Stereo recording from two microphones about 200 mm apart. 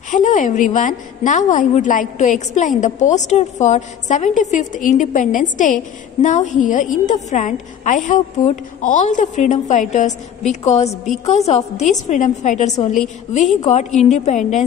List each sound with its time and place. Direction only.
0.1 s a woman's voice: 40° left (ahead or behind)